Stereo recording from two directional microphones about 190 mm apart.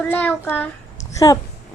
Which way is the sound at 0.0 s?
5° left (ahead or behind).